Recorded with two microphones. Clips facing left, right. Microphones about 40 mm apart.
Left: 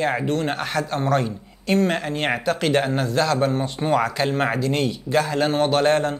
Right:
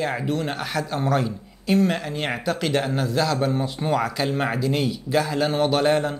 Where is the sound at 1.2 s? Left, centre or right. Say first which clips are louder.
Even; centre.